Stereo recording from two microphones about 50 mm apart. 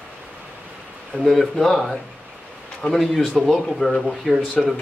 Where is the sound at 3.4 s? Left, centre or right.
Centre.